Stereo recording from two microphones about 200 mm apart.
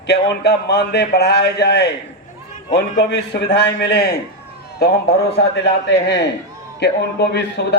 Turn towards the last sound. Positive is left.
turn(degrees=55)  # may be behind; listen again after turning